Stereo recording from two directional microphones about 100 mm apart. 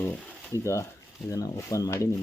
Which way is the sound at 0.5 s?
30° left (ahead or behind).